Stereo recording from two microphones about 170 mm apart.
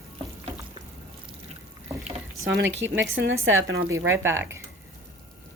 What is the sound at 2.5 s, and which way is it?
A woman's voice, 90° right.